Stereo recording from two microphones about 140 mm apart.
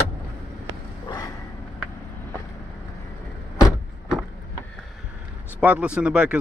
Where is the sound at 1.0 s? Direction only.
25° left (ahead or behind).